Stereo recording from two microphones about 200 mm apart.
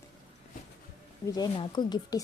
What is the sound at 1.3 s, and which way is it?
Speech, 20° left (ahead or behind).